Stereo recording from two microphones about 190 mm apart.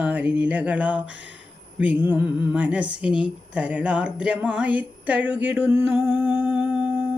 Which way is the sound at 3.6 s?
5° right (ahead or behind).